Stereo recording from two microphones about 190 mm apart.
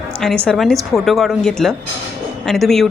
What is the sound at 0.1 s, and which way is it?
A woman's voice, 5° left (ahead or behind).